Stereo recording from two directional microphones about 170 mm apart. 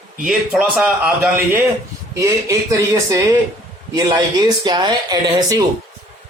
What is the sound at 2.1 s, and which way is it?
A man's voice, 20° right (ahead or behind).